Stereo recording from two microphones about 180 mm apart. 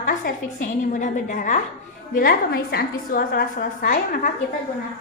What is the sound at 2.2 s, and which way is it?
A woman's voice, 60° left (ahead or behind).